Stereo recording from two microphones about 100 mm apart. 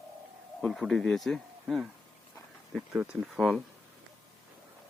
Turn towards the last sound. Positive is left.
turn(degrees=-10)  # may be behind; listen again after turning